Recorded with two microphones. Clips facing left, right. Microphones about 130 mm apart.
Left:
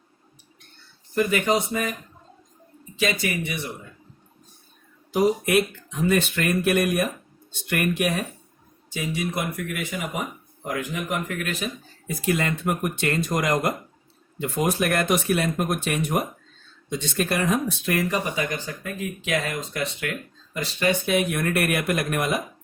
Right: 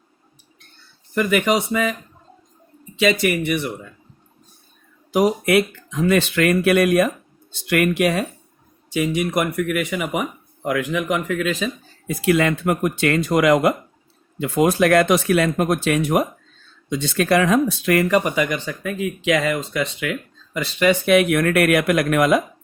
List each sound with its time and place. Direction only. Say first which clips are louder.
1.1 s speech: right 3 dB; 85° right
2.9 s speech: right 7 dB; 70° right (ahead or behind)
5.1 s speech: right 3 dB; 90° right
8.9 s speech: right 7 dB; 75° right (ahead or behind); by 22.4 s 90° right